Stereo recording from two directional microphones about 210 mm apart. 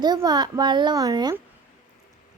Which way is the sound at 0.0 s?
20° right (ahead or behind).